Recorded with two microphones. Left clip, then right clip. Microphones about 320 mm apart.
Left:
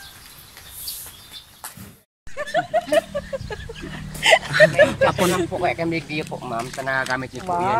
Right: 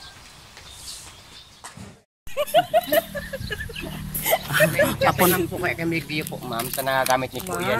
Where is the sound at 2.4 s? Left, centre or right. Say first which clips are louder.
Right 3 dB; centre.